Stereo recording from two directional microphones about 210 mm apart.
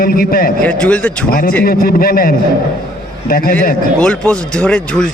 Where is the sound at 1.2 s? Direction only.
40° left (ahead or behind).